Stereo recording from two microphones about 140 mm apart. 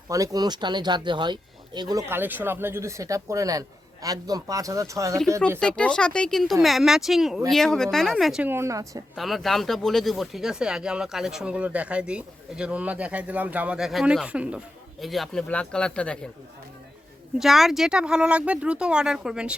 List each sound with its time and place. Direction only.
0.1 s speech: 25° right (ahead or behind)
5.5 s speech: 5° left (ahead or behind)
8.4 s speech: 20° right (ahead or behind)
9.1 s speech: centre (ahead or behind)
17.4 s speech: centre (ahead or behind)